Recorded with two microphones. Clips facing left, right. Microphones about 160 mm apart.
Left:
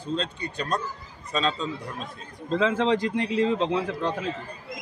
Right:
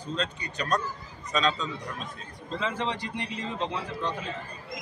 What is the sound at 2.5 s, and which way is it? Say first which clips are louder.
Speech: left 8 dB; 90° left.